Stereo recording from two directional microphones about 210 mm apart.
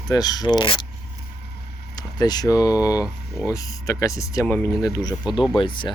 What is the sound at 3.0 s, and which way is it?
Speech, 5° right (ahead or behind).